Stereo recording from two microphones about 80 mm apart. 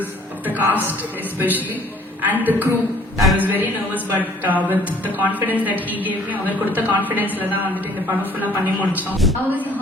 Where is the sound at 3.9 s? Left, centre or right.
Left.